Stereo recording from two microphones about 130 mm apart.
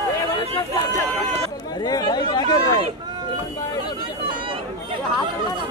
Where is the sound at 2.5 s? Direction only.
30° left (ahead or behind).